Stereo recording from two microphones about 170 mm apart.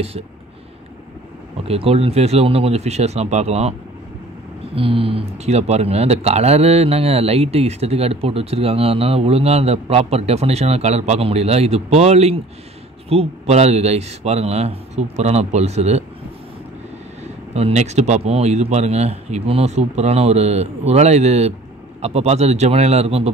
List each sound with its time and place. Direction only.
1.7 s speech: 35° right (ahead or behind)
4.7 s speech: 35° right (ahead or behind)
17.6 s speech: 40° right (ahead or behind)